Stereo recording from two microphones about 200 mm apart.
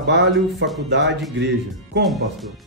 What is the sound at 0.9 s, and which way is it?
Speech, 60° right (ahead or behind).